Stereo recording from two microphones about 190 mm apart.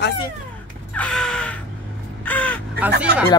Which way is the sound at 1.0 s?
5° left (ahead or behind).